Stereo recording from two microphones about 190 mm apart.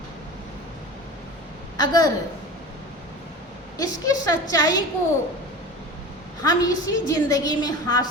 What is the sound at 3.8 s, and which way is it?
A woman's voice, 20° left (ahead or behind).